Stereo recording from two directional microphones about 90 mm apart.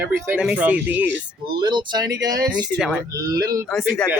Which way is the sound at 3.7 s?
5° left (ahead or behind).